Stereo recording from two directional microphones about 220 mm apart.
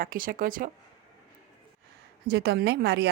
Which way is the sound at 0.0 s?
40° right (ahead or behind).